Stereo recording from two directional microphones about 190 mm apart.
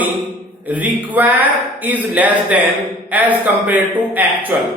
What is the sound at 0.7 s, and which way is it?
Speech, 10° right (ahead or behind).